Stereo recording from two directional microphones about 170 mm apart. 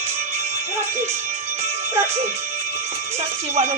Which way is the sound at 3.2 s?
40° right (ahead or behind).